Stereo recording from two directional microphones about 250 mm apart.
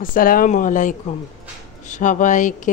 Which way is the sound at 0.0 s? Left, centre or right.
Left.